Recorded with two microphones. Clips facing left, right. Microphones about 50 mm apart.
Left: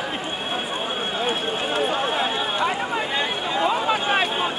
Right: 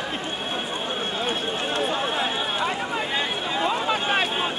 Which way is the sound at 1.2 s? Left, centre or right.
Centre.